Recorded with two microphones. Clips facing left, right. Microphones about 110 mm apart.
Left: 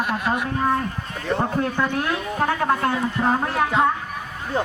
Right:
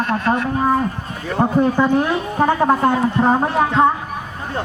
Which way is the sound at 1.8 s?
15° right (ahead or behind).